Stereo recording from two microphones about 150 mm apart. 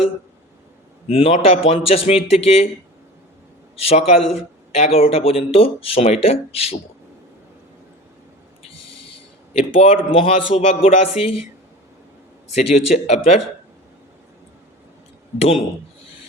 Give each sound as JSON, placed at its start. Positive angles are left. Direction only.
{"t": 1.0, "sound": "a man's voice", "side_deg": 40}
{"t": 3.8, "sound": "speech", "side_deg": 45}
{"t": 9.5, "sound": "speech", "side_deg": 40}
{"t": 13.1, "sound": "a man's voice", "side_deg": 45}
{"t": 15.4, "sound": "speech", "side_deg": 40}